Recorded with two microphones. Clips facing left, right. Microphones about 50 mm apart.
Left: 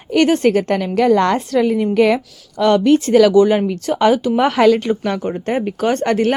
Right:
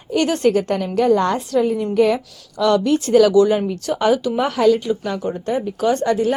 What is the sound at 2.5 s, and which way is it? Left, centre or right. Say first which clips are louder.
A woman's voice: left 4 dB; left.